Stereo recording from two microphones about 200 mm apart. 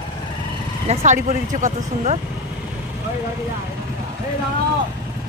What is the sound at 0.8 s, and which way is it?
Speech, 35° right (ahead or behind).